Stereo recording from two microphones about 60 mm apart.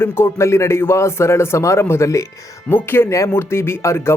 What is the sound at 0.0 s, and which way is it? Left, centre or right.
Speech, left.